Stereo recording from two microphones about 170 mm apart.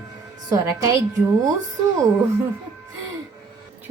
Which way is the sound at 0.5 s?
20° right (ahead or behind).